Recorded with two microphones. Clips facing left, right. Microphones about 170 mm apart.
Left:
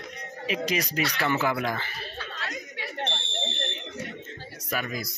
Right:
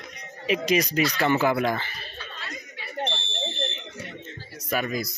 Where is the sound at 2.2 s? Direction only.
80° left.